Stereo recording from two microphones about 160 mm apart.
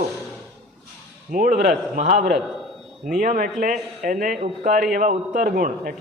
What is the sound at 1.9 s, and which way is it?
A man's voice, 50° right (ahead or behind).